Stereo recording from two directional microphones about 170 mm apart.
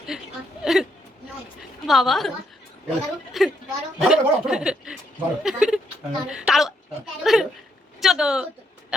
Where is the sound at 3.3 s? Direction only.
Centre (ahead or behind).